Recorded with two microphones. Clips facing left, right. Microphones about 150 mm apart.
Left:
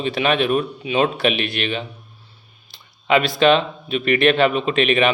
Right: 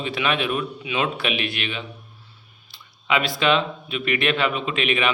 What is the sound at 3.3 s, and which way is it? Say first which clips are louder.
A man's voice: left 5 dB; 35° left (ahead or behind).